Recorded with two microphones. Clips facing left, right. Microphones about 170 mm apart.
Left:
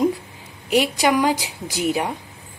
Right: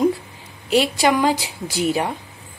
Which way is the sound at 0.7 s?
15° left (ahead or behind).